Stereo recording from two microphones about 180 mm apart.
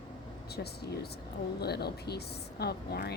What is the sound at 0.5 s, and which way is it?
Speech, 65° left (ahead or behind).